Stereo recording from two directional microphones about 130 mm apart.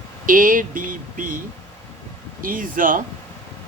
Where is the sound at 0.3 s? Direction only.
90° right.